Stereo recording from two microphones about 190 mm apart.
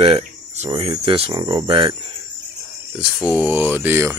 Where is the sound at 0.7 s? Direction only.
25° right (ahead or behind).